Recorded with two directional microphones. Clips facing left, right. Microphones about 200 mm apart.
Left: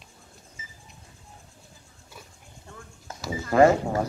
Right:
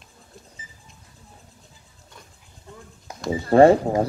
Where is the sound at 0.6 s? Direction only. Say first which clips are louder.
Even; 35° right (ahead or behind).